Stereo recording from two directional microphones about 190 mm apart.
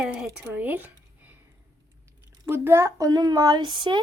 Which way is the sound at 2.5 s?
15° right (ahead or behind).